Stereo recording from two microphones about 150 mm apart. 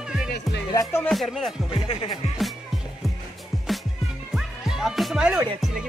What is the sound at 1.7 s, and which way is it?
Speech, 40° left (ahead or behind).